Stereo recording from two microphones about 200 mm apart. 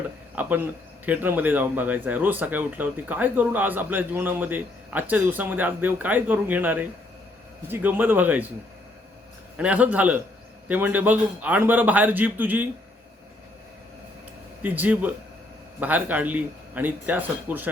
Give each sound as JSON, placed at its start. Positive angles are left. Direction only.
{"t": 0.4, "sound": "speech", "side_deg": -10}
{"t": 9.6, "sound": "speech", "side_deg": -5}
{"t": 14.6, "sound": "speech", "side_deg": -10}